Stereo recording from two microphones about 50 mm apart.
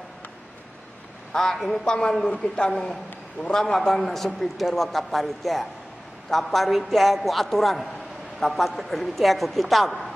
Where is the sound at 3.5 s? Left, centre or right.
Centre.